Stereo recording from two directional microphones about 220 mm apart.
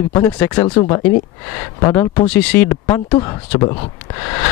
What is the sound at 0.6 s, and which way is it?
Speech, 25° left (ahead or behind).